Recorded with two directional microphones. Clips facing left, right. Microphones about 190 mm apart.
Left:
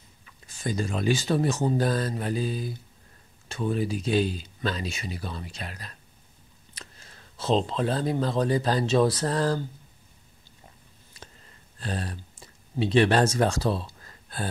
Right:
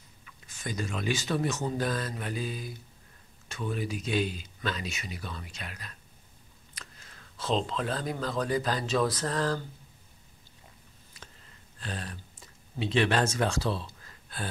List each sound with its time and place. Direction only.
0.2 s speech: 30° left (ahead or behind)
11.8 s speech: 35° left (ahead or behind)